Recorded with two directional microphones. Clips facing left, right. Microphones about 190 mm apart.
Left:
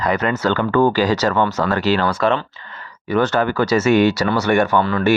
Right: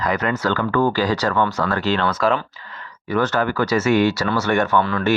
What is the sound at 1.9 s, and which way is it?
Speech, 10° left (ahead or behind).